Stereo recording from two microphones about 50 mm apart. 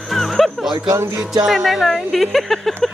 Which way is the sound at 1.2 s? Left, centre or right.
Centre.